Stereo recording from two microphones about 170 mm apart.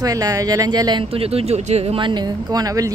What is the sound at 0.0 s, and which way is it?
Speech, 20° right (ahead or behind).